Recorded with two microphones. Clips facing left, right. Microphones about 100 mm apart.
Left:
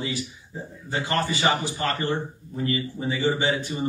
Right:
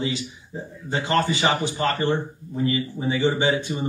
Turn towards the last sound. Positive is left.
turn(degrees=-20)  # may be behind; listen again after turning